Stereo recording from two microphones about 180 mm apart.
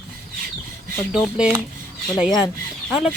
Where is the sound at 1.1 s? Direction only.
5° right (ahead or behind).